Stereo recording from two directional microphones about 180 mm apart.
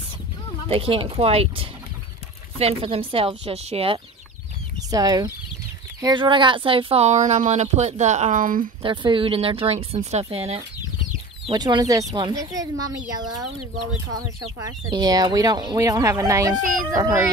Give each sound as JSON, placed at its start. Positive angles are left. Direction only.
{"t": 0.7, "sound": "speech", "side_deg": -30}
{"t": 4.9, "sound": "speech", "side_deg": -20}
{"t": 8.8, "sound": "speech", "side_deg": -25}
{"t": 11.4, "sound": "speech", "side_deg": -25}
{"t": 14.6, "sound": "speech", "side_deg": -20}